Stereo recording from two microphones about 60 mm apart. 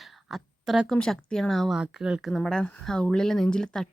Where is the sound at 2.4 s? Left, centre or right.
Centre.